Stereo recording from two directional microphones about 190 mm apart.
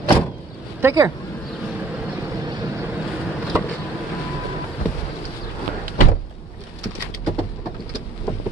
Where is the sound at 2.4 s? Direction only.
20° right (ahead or behind).